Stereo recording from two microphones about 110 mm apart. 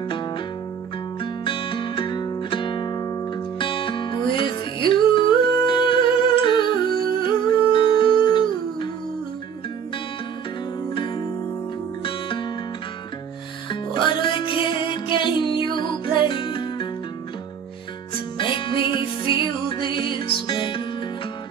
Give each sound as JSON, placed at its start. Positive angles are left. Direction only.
{"t": 1.2, "sound": "music", "side_deg": 50}
{"t": 3.5, "sound": "music", "side_deg": 50}
{"t": 12.0, "sound": "music", "side_deg": 50}
{"t": 13.7, "sound": "music", "side_deg": 45}
{"t": 18.4, "sound": "music", "side_deg": 50}